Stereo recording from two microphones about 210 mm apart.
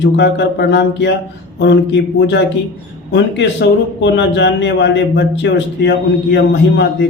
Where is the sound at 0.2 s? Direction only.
55° left (ahead or behind).